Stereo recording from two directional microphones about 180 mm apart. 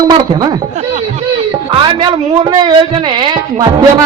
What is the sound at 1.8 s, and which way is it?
Speech, 25° right (ahead or behind).